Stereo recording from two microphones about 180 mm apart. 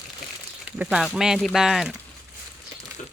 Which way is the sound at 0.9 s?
Centre (ahead or behind).